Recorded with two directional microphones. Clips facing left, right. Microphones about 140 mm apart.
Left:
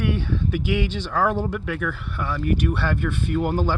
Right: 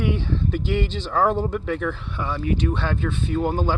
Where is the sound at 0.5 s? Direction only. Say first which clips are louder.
Left 2 dB; 10° left (ahead or behind).